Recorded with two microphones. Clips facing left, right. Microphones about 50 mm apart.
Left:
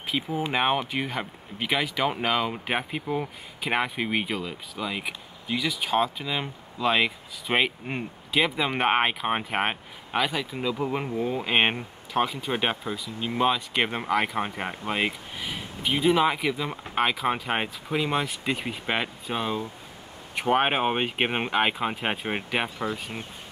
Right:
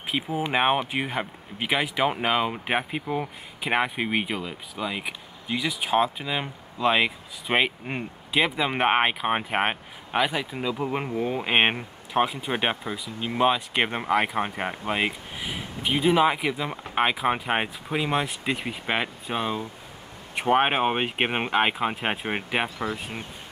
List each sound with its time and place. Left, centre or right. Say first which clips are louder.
0.3 s speech: right 2 dB; centre
11.1 s speech: right 1 dB; right
11.3 s speech: right 2 dB; centre